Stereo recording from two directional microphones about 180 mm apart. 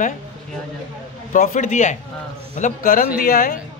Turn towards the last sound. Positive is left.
turn(degrees=55)  # may be behind; listen again after turning